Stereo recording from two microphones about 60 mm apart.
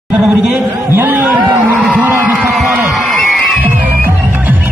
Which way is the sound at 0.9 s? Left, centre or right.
Right.